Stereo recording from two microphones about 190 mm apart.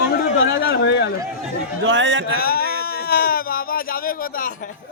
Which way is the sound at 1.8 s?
75° right (ahead or behind).